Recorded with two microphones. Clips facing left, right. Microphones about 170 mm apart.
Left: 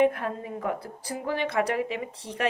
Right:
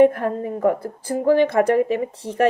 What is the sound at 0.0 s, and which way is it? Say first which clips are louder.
A woman's voice: right 8 dB; 45° right (ahead or behind).